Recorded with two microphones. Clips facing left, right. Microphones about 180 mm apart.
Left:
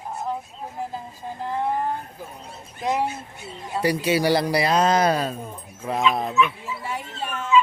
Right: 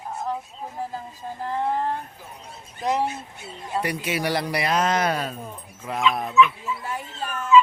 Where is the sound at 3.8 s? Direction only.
30° left (ahead or behind).